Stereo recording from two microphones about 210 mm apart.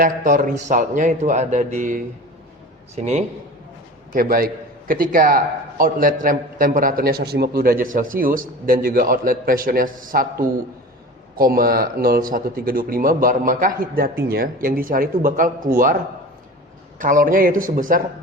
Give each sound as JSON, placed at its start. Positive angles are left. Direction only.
{"t": 0.0, "sound": "a man's voice", "side_deg": -40}
{"t": 4.1, "sound": "a man's voice", "side_deg": -45}
{"t": 11.3, "sound": "a man's voice", "side_deg": -45}
{"t": 17.0, "sound": "a man's voice", "side_deg": -40}